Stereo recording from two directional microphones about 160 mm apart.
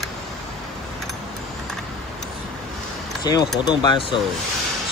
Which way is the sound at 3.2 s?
25° left (ahead or behind).